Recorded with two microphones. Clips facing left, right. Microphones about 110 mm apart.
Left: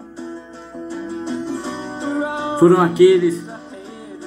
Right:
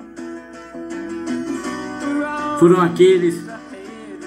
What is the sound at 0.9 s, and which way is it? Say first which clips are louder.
Music: right 1 dB; 15° left (ahead or behind).